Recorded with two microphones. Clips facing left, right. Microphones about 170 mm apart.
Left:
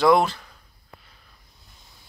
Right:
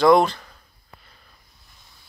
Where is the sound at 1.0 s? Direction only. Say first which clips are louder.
Right 1 dB; 5° left (ahead or behind).